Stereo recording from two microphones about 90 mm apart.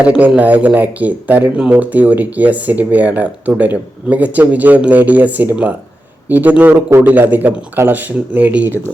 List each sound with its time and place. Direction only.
0.0 s speech: 15° right (ahead or behind)